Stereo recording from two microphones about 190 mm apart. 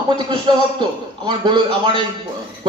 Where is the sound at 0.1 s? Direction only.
25° right (ahead or behind).